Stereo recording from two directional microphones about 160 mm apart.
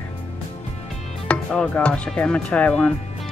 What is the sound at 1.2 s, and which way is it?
Speech, 5° left (ahead or behind).